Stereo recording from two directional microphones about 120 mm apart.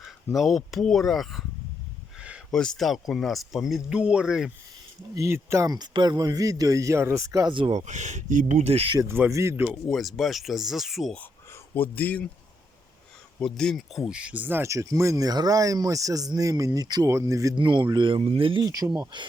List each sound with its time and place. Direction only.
0.3 s speech: centre (ahead or behind)
2.1 s a sound: 10° right (ahead or behind)
2.5 s speech: 5° left (ahead or behind)
5.1 s speech: 25° right (ahead or behind)
7.7 s speech: 80° right; by 9.0 s 55° right (ahead or behind)
9.0 s speech: 20° right (ahead or behind)
9.6 s speech: centre (ahead or behind)
11.2 s speech: 15° left (ahead or behind)
13.4 s speech: 5° left (ahead or behind); by 17.5 s 25° right (ahead or behind)
17.6 s speech: 40° right (ahead or behind)
18.6 s speech: 30° right (ahead or behind)